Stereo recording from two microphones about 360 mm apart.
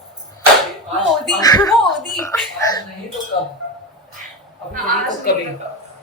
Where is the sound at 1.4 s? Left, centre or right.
Centre.